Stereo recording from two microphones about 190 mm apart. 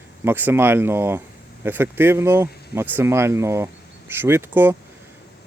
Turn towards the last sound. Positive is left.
turn(degrees=-10)  # may be behind; listen again after turning